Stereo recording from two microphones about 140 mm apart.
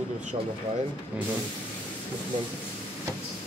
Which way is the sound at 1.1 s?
10° right (ahead or behind).